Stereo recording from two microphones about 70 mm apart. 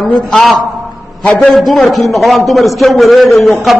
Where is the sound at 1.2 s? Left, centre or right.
Centre.